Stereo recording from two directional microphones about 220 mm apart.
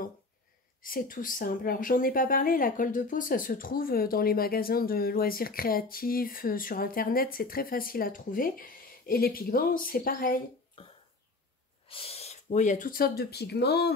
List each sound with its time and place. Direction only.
0.8 s a woman's voice: 40° left (ahead or behind)
10.8 s cough: 25° left (ahead or behind)
11.9 s a sound: 25° left (ahead or behind)
12.4 s speech: 35° left (ahead or behind)